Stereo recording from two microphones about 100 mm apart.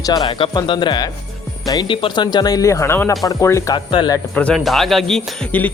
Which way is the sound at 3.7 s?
50° left (ahead or behind).